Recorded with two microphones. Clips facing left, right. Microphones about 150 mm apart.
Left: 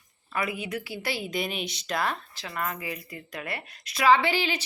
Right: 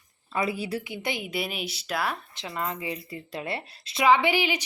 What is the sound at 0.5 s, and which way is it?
Speech, 35° right (ahead or behind).